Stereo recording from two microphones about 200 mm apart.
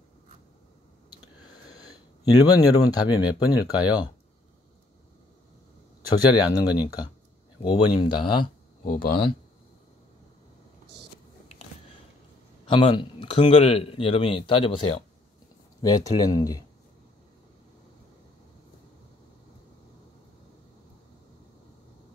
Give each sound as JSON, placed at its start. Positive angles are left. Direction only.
{"t": 2.4, "sound": "speech", "side_deg": 20}
{"t": 6.3, "sound": "speech", "side_deg": 20}
{"t": 8.8, "sound": "speech", "side_deg": 45}
{"t": 12.6, "sound": "speech", "side_deg": 25}